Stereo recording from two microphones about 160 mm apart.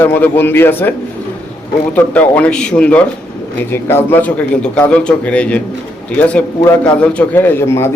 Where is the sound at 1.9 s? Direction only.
10° left (ahead or behind).